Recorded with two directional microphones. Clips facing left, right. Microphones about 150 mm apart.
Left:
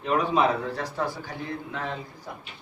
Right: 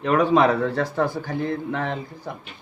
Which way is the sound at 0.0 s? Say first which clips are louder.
Right 5 dB; 70° right (ahead or behind).